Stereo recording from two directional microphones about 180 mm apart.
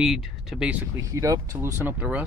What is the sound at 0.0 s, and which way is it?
Speech, 5° right (ahead or behind).